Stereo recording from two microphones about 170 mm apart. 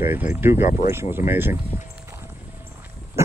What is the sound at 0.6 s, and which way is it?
Speech, 50° left (ahead or behind).